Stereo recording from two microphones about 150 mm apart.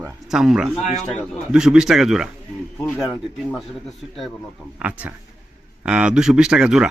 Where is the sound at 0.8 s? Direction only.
50° left (ahead or behind).